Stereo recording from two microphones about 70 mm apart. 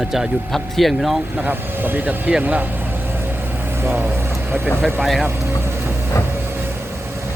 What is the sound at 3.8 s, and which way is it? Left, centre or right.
Speech, right.